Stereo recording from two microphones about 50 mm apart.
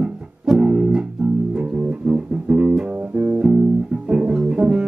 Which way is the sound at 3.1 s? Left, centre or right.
Right.